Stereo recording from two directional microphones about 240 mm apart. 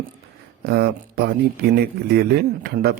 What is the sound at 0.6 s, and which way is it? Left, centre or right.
A man's voice, right.